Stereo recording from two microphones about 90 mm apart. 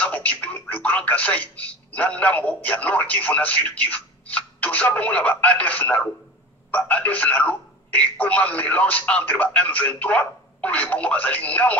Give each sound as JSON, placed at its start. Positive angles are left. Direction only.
{"t": 0.0, "sound": "speech", "side_deg": 15}